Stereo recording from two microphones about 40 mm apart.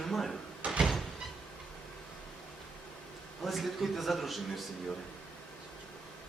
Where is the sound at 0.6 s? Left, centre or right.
Right.